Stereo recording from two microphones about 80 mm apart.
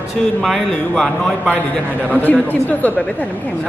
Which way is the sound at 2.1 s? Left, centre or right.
Left.